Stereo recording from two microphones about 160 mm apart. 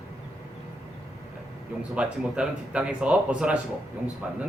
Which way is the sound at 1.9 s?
5° right (ahead or behind).